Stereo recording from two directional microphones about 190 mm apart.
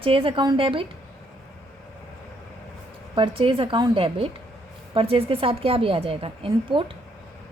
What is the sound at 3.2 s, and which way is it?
A woman's voice, 30° right (ahead or behind).